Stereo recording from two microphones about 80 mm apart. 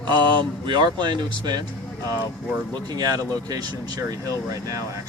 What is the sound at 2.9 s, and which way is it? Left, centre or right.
Speech, right.